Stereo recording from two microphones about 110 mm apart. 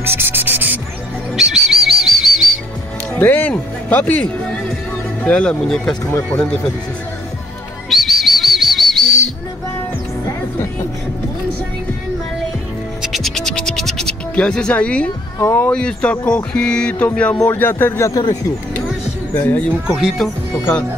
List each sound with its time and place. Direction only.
0.0 s music: 20° right (ahead or behind)
1.3 s bird: 5° right (ahead or behind)
3.2 s speech: 15° left (ahead or behind)
7.9 s bird: centre (ahead or behind)
13.0 s scratch: centre (ahead or behind)
15.3 s speech: 20° left (ahead or behind)
15.7 s speech: 10° left (ahead or behind); by 18.2 s 25° left (ahead or behind)
19.3 s speech: 15° left (ahead or behind)
20.0 s speech: 5° right (ahead or behind)